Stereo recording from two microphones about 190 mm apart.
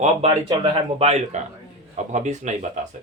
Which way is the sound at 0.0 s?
30° right (ahead or behind).